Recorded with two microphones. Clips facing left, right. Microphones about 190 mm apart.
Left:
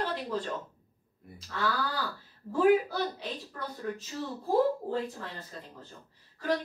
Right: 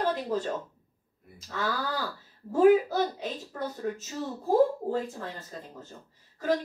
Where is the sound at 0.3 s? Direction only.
45° right (ahead or behind).